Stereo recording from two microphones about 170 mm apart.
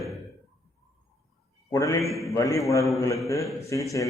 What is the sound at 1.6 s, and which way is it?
A man's voice, 20° left (ahead or behind).